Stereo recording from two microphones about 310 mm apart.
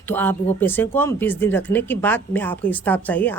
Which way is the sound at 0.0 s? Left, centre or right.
Centre.